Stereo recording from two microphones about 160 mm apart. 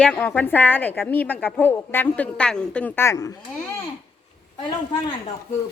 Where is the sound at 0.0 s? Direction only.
10° left (ahead or behind).